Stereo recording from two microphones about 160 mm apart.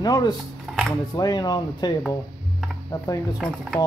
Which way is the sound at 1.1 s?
25° left (ahead or behind).